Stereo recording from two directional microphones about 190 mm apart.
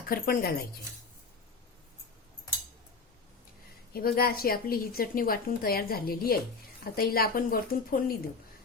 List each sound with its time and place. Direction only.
0.1 s a woman's voice: 50° left (ahead or behind)
3.9 s a woman's voice: 50° left (ahead or behind)